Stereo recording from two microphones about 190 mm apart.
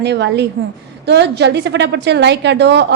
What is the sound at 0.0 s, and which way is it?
A woman's voice, 65° right (ahead or behind).